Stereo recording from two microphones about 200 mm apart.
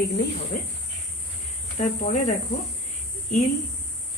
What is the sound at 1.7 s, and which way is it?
Speech, 35° left (ahead or behind).